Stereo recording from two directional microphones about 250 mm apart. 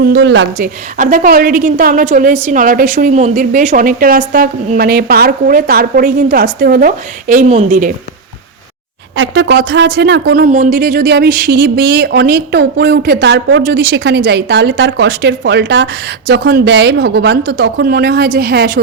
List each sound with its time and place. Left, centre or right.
0.0 s speech: right
0.9 s speech: right
9.1 s speech: right